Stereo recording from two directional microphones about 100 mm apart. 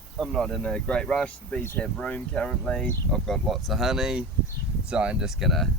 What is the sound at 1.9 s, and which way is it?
Speech, 10° left (ahead or behind).